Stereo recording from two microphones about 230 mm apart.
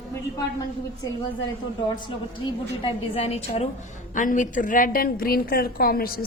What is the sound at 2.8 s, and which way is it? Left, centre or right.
A woman's voice, left.